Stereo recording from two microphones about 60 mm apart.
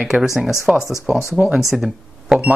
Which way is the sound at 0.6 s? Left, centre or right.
Centre.